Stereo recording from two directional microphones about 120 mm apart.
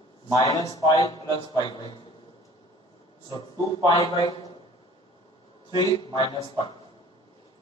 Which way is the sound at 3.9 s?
35° left (ahead or behind).